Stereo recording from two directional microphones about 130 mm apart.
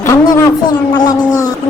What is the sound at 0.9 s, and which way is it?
Speech, 30° left (ahead or behind).